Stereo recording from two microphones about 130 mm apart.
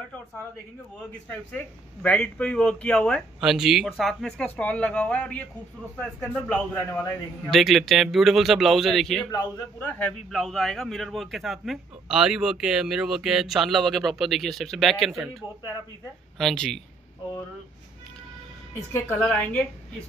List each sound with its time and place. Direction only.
2.0 s speech: 10° left (ahead or behind)
3.3 s speech: 5° right (ahead or behind); by 7.5 s 15° left (ahead or behind)
7.5 s speech: centre (ahead or behind)
9.3 s a man's voice: 25° left (ahead or behind)
10.3 s speech: 5° left (ahead or behind)
16.3 s speech: centre (ahead or behind)
19.1 s speech: 5° left (ahead or behind)